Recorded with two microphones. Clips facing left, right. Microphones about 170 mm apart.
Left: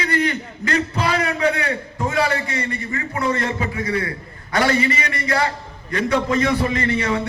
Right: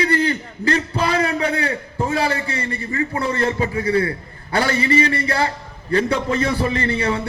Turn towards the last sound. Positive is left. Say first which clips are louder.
# even
turn(degrees=-30)  # may be behind; listen again after turning